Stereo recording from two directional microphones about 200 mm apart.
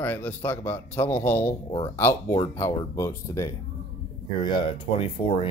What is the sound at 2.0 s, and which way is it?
A man's voice, 10° left (ahead or behind).